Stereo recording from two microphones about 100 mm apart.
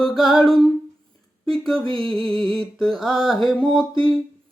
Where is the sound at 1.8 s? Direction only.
60° right (ahead or behind).